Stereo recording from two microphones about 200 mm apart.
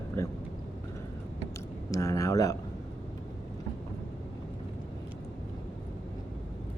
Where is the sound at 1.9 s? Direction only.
15° left (ahead or behind).